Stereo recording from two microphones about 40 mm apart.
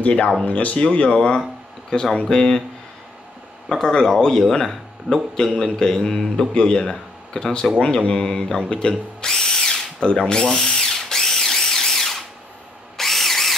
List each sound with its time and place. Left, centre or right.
0.0 s speech: left
0.7 s a man's voice: left
3.6 s a man's voice: centre
7.8 s drill: left; by 13.6 s centre